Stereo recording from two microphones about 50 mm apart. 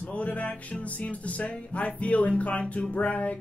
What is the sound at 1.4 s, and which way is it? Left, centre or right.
Speech, left.